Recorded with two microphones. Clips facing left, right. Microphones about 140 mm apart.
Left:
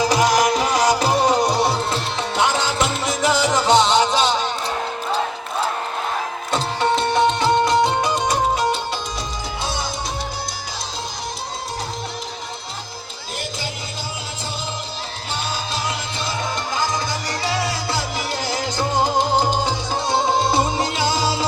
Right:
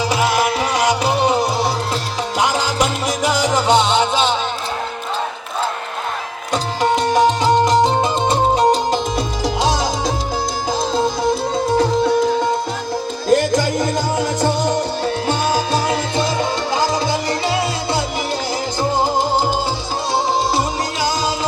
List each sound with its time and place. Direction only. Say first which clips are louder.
0.0 s music: left 1 dB; 10° right (ahead or behind)
0.3 s music: even; 40° left (ahead or behind)
1.3 s music: even; centre (ahead or behind)
2.4 s music: right 2 dB; 10° right (ahead or behind)
6.5 s music: right 3 dB; 15° right (ahead or behind)
8.5 s music: right 7 dB; 40° right (ahead or behind)
9.6 s music: right 8 dB; 90° right
13.3 s music: right 16 dB; 85° right; by 16.0 s 60° right (ahead or behind)
16.8 s music: right 5 dB; 30° right (ahead or behind)
18.8 s music: right 2 dB; 10° right (ahead or behind)
20.5 s music: even; 25° left (ahead or behind)